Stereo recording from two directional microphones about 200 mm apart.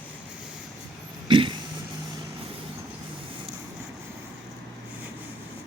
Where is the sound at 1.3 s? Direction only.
25° right (ahead or behind).